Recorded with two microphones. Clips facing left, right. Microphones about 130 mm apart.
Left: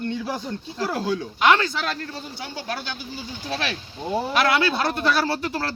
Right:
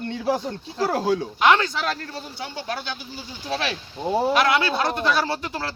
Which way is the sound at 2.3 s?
25° right (ahead or behind).